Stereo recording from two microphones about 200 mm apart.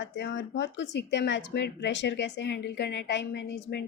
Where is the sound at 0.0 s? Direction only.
60° left (ahead or behind).